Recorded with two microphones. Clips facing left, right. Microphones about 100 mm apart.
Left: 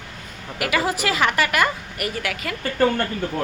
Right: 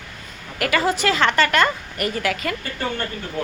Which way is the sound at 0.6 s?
15° left (ahead or behind).